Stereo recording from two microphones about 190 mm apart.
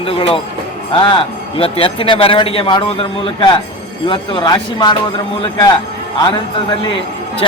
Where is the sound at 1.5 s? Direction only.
30° left (ahead or behind).